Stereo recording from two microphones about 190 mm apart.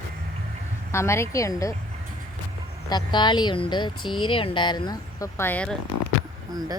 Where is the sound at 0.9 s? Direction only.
15° left (ahead or behind).